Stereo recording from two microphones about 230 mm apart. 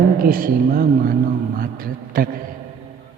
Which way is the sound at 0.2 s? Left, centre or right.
Right.